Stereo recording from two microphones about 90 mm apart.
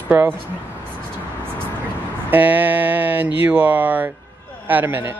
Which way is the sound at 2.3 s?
20° right (ahead or behind).